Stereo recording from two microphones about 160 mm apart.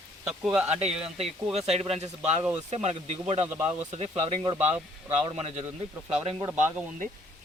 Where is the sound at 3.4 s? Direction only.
15° right (ahead or behind).